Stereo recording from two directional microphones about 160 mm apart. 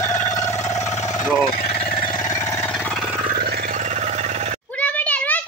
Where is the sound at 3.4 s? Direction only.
75° right (ahead or behind).